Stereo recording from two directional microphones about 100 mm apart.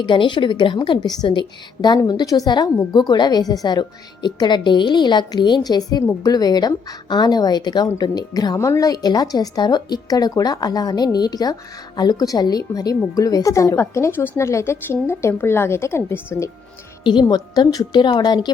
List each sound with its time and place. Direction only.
0.0 s a woman's voice: 55° left (ahead or behind)
8.5 s a woman's voice: 30° left (ahead or behind)
17.0 s a woman's voice: 50° left (ahead or behind)